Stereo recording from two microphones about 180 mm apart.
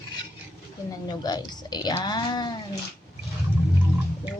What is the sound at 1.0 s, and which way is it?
Speech, 20° left (ahead or behind).